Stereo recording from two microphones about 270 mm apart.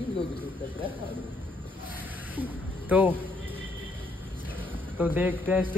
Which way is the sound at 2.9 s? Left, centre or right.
Centre.